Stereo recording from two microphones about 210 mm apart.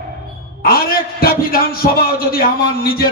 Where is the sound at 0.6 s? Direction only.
45° left (ahead or behind).